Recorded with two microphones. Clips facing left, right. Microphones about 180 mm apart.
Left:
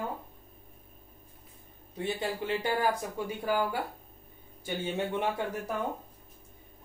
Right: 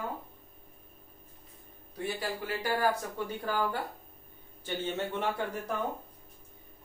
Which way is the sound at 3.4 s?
10° left (ahead or behind).